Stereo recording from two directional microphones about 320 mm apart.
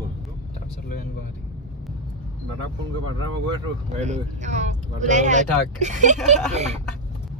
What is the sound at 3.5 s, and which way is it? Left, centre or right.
Speech, centre.